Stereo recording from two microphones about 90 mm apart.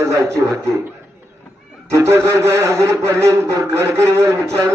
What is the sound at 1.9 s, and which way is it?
A man's voice, 30° right (ahead or behind).